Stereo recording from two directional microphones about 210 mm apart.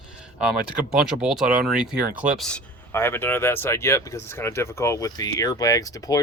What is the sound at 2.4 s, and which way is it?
Speech, 10° left (ahead or behind).